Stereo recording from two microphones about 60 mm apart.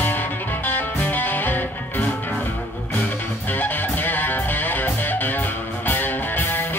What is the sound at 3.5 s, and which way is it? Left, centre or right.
Music, left.